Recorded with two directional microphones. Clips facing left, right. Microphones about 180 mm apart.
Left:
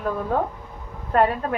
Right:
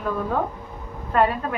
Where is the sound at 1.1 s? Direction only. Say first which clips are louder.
Left 1 dB; 40° left (ahead or behind).